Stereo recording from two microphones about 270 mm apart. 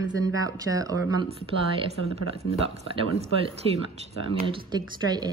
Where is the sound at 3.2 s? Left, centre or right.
Right.